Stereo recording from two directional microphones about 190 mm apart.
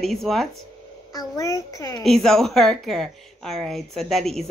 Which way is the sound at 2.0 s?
Centre (ahead or behind).